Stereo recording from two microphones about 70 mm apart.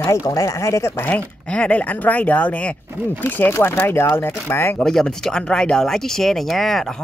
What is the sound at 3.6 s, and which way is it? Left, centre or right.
Speech, left.